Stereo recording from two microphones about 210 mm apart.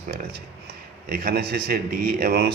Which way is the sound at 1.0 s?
45° right (ahead or behind).